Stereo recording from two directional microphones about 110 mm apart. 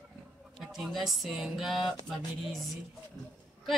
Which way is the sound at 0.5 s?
Centre (ahead or behind).